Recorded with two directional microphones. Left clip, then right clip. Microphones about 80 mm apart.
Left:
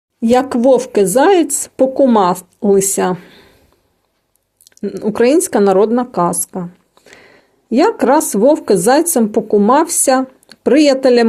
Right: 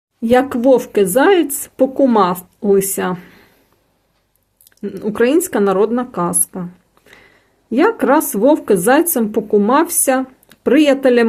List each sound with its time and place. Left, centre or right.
0.2 s speech: left
3.2 s a sound: centre
5.1 s a woman's voice: left